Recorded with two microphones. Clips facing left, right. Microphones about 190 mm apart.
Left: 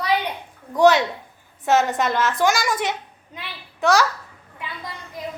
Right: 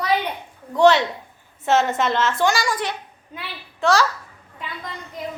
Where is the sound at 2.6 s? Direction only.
20° left (ahead or behind).